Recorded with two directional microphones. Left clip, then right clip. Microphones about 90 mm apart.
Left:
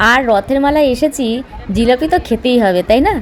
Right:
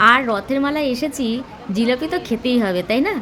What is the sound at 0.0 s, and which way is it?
A woman's voice, 45° left (ahead or behind).